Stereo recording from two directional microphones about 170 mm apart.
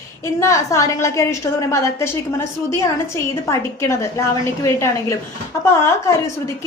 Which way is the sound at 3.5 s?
15° left (ahead or behind).